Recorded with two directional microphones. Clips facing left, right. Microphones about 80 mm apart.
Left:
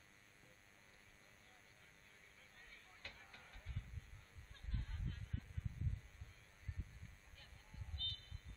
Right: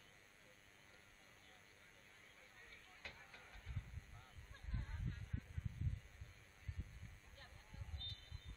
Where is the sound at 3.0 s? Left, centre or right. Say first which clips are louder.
Right 1 dB; centre.